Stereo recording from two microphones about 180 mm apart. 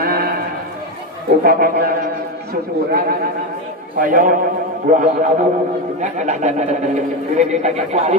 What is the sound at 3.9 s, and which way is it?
A man's voice, 50° right (ahead or behind).